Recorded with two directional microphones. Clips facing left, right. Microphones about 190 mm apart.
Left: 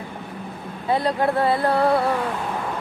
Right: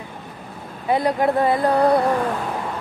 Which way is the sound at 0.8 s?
20° right (ahead or behind).